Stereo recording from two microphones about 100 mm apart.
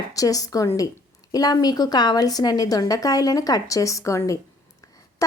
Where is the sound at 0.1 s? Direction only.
35° left (ahead or behind).